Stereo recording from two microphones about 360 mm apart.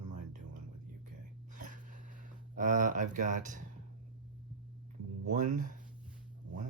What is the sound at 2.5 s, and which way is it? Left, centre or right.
Speech, right.